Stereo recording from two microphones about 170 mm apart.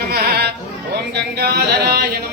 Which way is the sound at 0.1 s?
65° right (ahead or behind).